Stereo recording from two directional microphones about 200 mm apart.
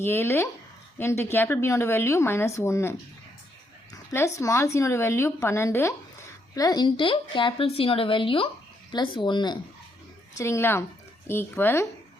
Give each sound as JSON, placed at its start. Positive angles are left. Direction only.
{"t": 0.0, "sound": "speech", "side_deg": 15}
{"t": 4.1, "sound": "a woman's voice", "side_deg": 15}